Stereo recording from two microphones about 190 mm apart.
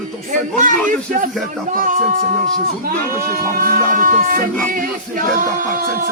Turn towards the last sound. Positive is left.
turn(degrees=-45)  # may be behind; listen again after turning